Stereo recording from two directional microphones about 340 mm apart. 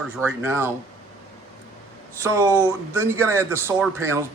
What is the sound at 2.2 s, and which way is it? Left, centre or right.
Speech, centre.